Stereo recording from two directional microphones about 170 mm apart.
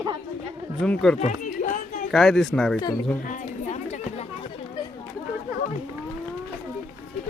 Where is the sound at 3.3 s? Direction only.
45° left (ahead or behind).